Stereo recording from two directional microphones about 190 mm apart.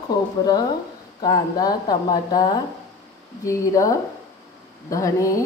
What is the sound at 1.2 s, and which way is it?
Speech, 20° left (ahead or behind).